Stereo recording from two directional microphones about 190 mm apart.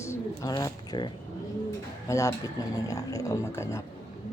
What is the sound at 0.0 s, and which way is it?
Speech, 15° left (ahead or behind).